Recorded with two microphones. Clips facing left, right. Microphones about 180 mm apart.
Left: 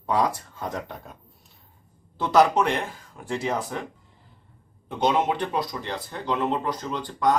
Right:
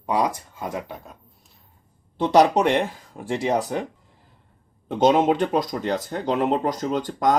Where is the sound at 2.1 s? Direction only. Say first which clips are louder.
Right 2 dB; 25° right (ahead or behind).